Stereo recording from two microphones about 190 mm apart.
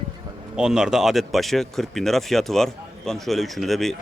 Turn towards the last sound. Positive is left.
turn(degrees=0)  # may be behind; listen again after turning